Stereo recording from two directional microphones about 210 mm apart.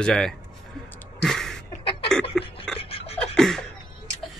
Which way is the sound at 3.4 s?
Centre (ahead or behind).